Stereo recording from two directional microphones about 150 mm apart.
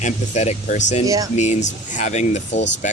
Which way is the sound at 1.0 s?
25° right (ahead or behind).